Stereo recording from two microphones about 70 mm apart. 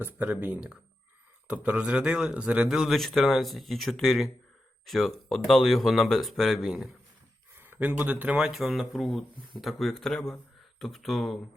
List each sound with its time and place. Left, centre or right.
0.0 s speech: right
2.6 s speech: centre
7.5 s speech: right
8.4 s speech: centre